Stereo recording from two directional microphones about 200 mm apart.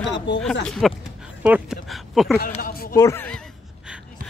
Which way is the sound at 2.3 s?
45° left (ahead or behind).